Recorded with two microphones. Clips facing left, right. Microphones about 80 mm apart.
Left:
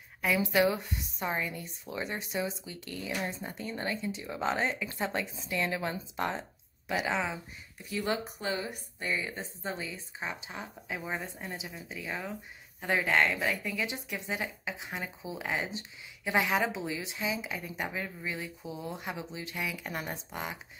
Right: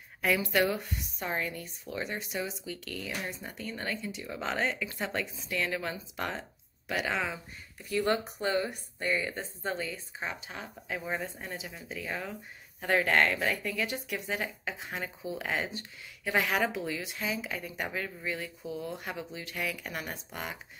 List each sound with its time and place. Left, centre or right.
0.2 s speech: centre
1.6 s speech: left